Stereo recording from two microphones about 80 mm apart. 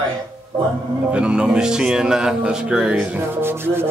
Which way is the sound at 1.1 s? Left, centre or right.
Centre.